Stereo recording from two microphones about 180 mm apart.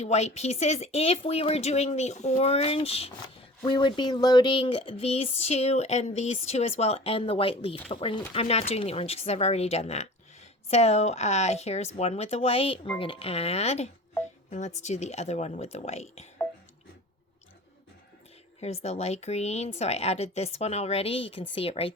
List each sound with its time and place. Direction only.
0.0 s speech: 40° left (ahead or behind)
18.6 s speech: 35° left (ahead or behind)